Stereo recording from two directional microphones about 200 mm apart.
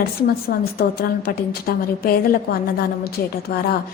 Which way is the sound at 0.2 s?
50° left (ahead or behind).